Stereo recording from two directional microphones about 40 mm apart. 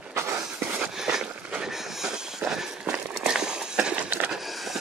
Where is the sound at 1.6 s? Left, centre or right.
Centre.